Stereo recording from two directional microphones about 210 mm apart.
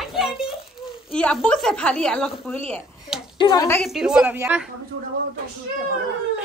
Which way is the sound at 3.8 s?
Centre (ahead or behind).